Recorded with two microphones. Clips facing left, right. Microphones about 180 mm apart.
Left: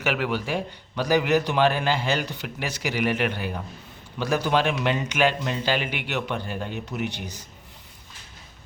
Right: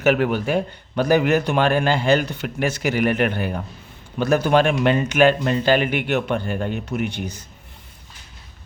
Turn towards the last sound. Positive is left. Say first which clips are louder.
# right 5 dB
turn(degrees=-55)  # may be behind; listen again after turning